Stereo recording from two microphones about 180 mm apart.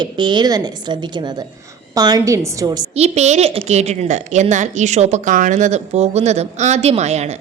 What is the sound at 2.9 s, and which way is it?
A woman's voice, 35° right (ahead or behind).